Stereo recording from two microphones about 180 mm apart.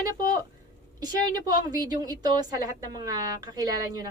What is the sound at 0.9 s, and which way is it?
A woman's voice, 25° right (ahead or behind).